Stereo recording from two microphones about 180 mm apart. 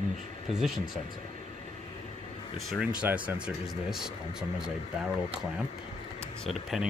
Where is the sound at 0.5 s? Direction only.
Centre (ahead or behind).